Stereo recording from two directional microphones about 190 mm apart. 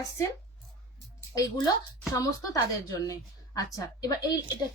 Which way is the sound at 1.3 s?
20° left (ahead or behind).